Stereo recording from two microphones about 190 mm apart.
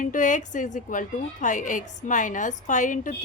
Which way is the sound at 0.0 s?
45° left (ahead or behind).